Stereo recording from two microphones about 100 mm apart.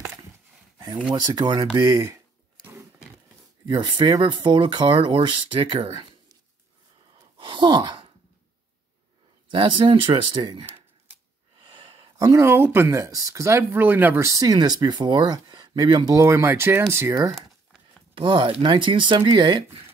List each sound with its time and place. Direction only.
1.2 s speech: 45° right (ahead or behind)
2.6 s a sound: 30° right (ahead or behind)
3.6 s speech: 50° right (ahead or behind)
7.3 s sigh: 55° right (ahead or behind)
9.5 s speech: 55° right (ahead or behind)
12.2 s speech: 30° right (ahead or behind)
13.6 s speech: 20° right (ahead or behind)
14.2 s speech: 35° right (ahead or behind)
16.2 s speech: 25° right (ahead or behind)
18.1 s speech: 55° right (ahead or behind)